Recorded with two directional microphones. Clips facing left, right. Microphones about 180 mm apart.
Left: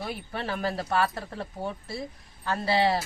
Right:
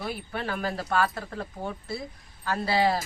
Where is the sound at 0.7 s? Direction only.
25° left (ahead or behind).